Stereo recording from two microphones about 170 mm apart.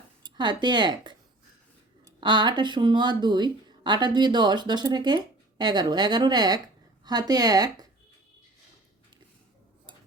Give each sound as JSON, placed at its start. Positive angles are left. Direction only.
{"t": 0.2, "sound": "speech", "side_deg": -25}